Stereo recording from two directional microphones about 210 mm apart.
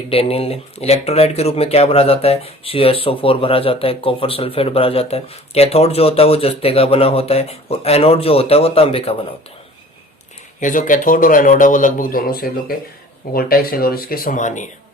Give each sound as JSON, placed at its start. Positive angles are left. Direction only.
{"t": 0.1, "sound": "speech", "side_deg": 25}
{"t": 10.6, "sound": "a man's voice", "side_deg": 40}